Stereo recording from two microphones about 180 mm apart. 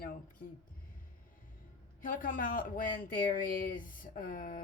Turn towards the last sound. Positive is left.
turn(degrees=50)  # may be behind; listen again after turning